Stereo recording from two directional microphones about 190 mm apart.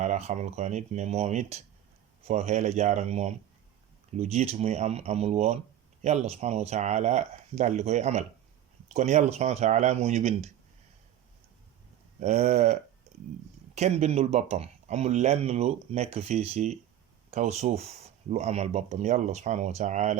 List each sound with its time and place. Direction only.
0.0 s speech: 35° right (ahead or behind)
12.2 s speech: 35° right (ahead or behind)
13.1 s a sound: 35° right (ahead or behind)
13.7 s speech: 35° right (ahead or behind)